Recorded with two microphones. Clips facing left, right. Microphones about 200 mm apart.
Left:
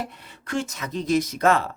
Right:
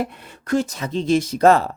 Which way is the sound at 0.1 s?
50° right (ahead or behind).